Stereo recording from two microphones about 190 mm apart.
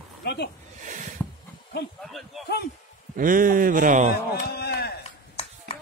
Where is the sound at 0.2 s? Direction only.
65° left (ahead or behind).